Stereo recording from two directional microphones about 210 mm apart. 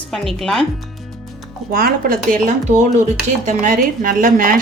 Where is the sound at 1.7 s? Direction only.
45° right (ahead or behind).